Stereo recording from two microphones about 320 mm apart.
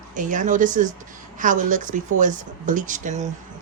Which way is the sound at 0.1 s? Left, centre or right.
Right.